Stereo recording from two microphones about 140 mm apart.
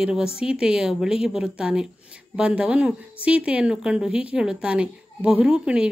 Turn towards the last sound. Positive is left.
turn(degrees=-5)  # may be behind; listen again after turning